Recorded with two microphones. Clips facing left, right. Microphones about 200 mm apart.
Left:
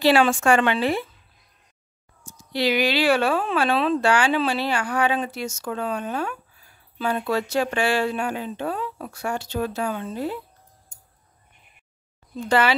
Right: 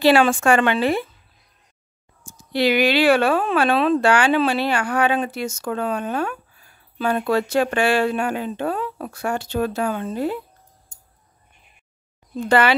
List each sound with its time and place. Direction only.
0.0 s speech: 55° right (ahead or behind)
2.2 s speech: 55° right (ahead or behind)
12.4 s speech: 60° right (ahead or behind)